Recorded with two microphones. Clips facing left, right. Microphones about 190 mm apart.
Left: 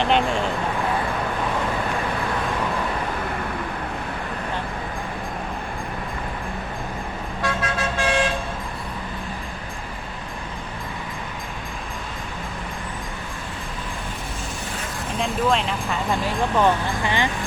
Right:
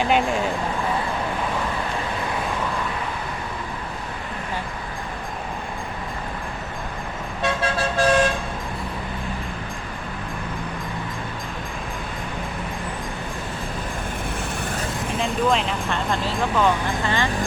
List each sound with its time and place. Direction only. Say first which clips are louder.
0.0 s vehicle: even; 5° right (ahead or behind)
7.4 s vehicle: right 2 dB; 30° right (ahead or behind)
15.2 s vehicle: even; centre (ahead or behind)
16.2 s vehicle: left 1 dB; 15° left (ahead or behind)